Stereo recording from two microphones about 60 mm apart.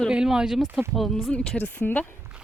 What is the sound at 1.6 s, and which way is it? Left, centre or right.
Speech, left.